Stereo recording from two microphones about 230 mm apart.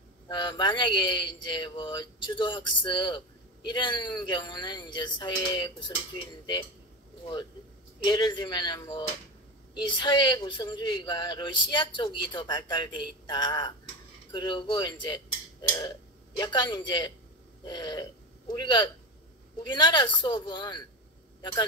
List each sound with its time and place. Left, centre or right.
0.3 s a woman's voice: centre
8.0 s a woman's voice: centre
16.3 s a woman's voice: centre